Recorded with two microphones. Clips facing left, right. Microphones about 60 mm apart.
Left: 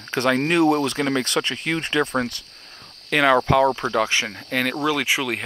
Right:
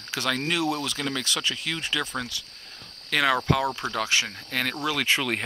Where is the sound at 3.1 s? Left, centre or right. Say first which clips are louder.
Left 6 dB; centre.